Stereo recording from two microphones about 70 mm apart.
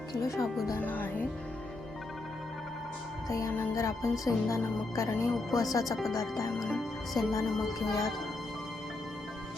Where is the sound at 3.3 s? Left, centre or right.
Left.